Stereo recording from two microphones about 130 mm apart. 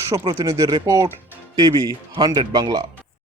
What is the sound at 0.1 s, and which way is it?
Speech, 30° right (ahead or behind).